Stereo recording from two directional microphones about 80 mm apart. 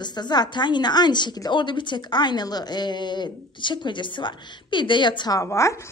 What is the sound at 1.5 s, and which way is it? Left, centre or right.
Speech, left.